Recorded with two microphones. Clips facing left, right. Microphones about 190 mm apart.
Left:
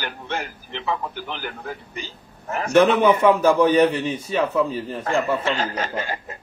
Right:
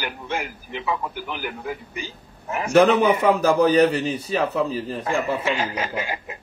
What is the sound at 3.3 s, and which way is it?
A man's voice, 35° right (ahead or behind).